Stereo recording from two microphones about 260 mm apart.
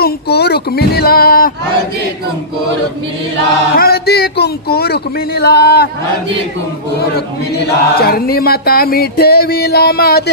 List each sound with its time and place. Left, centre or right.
0.0 s chant: left
3.7 s chant: left
7.2 s chant: left